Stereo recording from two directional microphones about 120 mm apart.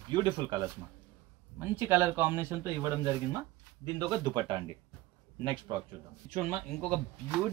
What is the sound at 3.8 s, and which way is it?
A man's voice, 35° right (ahead or behind).